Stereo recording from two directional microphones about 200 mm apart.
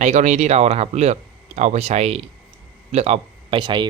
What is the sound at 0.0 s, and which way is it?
Speech, 35° right (ahead or behind).